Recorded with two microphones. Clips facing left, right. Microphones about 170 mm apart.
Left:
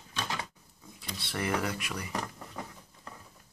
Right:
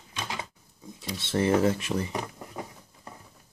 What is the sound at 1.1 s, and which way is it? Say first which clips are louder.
Speech: right 8 dB; 25° right (ahead or behind).